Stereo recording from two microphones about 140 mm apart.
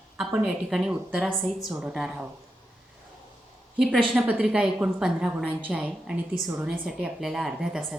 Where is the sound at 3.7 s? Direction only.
Centre (ahead or behind).